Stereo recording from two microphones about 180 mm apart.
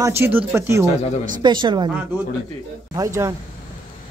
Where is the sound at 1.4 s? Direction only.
25° right (ahead or behind).